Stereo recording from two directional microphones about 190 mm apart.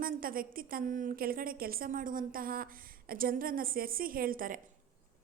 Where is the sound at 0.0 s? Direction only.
50° right (ahead or behind).